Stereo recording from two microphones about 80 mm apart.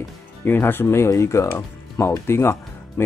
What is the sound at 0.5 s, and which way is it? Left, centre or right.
Speech, left.